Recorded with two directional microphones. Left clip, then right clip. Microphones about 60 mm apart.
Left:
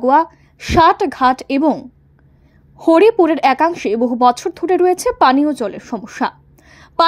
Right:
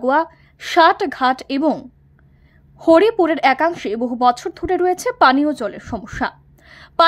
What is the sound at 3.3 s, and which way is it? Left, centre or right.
Speech, left.